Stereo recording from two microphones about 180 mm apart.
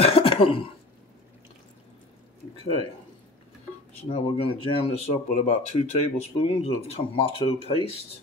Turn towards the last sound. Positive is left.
turn(degrees=30)  # may be behind; listen again after turning